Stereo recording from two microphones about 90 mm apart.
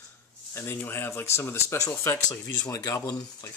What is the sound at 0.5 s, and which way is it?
Speech, 25° left (ahead or behind).